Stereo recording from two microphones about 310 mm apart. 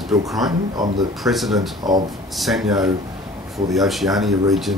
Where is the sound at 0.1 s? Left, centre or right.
Centre.